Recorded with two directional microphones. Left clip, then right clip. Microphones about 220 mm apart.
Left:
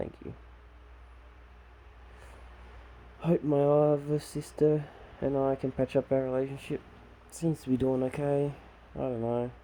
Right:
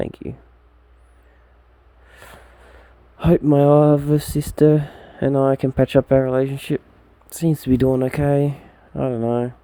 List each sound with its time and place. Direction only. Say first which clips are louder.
3.2 s speech: right 11 dB; 45° right (ahead or behind)